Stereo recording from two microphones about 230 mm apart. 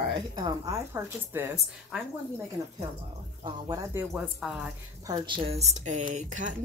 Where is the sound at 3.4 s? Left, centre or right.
Centre.